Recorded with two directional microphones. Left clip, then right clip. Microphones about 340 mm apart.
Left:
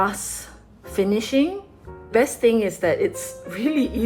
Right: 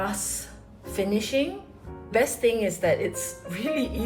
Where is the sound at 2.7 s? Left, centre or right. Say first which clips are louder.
Left 3 dB; centre.